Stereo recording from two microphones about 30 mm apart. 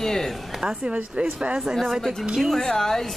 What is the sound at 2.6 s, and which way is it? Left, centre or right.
Speech, centre.